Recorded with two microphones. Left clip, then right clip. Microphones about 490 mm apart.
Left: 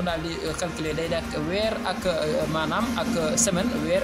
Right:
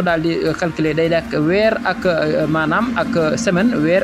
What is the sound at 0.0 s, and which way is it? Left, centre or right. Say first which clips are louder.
Speech: right 11 dB; left.